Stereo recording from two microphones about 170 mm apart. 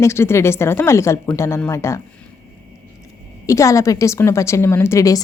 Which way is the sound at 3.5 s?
20° left (ahead or behind).